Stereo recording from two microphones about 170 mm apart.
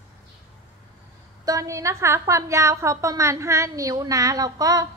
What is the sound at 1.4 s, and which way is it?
A woman's voice, 20° right (ahead or behind).